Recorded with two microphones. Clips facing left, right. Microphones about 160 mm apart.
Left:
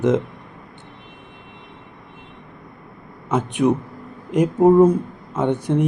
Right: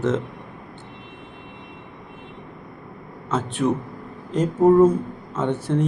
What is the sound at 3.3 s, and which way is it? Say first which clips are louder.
Speech: left 4 dB; 15° left (ahead or behind).